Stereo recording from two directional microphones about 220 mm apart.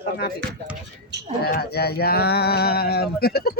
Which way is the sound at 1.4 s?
45° left (ahead or behind).